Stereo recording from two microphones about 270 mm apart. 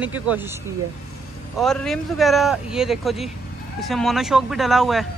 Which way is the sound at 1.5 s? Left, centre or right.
Centre.